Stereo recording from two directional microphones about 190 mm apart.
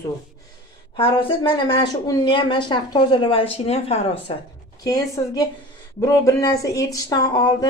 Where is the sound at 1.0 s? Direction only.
25° left (ahead or behind).